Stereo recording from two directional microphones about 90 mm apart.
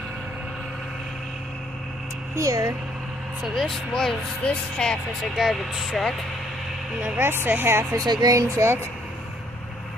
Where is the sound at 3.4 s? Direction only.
Centre (ahead or behind).